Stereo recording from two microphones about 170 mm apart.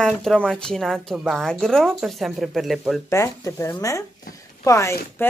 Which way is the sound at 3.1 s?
15° left (ahead or behind).